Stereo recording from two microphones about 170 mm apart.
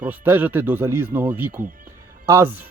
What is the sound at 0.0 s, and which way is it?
Speech, 10° right (ahead or behind).